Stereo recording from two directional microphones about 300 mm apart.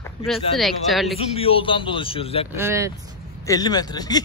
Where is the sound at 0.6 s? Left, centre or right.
Centre.